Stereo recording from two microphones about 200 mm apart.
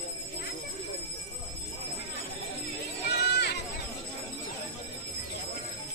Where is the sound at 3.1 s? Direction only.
55° left (ahead or behind).